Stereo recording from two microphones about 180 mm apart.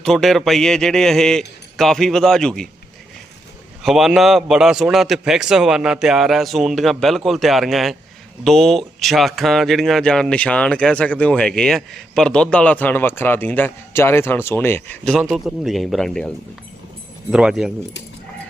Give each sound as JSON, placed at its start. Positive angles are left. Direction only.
{"t": 0.0, "sound": "speech", "side_deg": 0}
{"t": 3.8, "sound": "speech", "side_deg": 0}
{"t": 17.3, "sound": "speech", "side_deg": -5}